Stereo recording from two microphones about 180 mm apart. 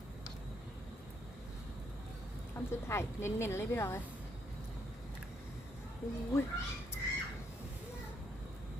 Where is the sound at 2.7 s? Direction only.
15° left (ahead or behind).